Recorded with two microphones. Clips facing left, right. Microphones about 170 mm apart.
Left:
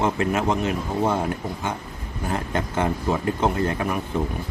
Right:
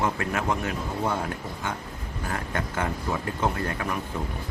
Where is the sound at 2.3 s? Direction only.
25° left (ahead or behind).